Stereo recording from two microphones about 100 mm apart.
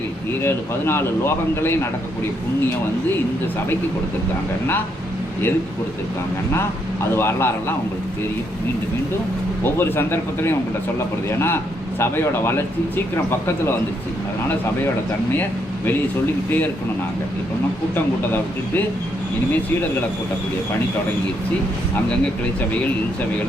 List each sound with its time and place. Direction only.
0.4 s speech: 25° left (ahead or behind)
7.2 s speech: 25° left (ahead or behind)
9.6 s speech: 25° left (ahead or behind)
18.3 s speech: 20° left (ahead or behind)